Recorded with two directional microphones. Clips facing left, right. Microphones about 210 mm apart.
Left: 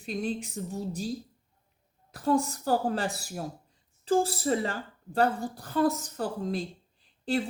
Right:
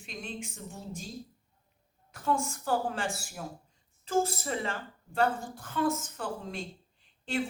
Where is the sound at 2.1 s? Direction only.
35° left (ahead or behind).